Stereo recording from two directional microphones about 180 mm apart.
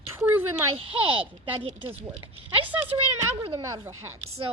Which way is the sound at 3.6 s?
15° right (ahead or behind).